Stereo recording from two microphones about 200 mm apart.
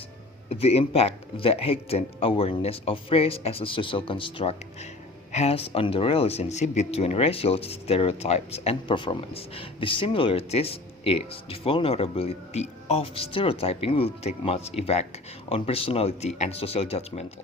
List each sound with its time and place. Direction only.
0.5 s speech: 30° left (ahead or behind)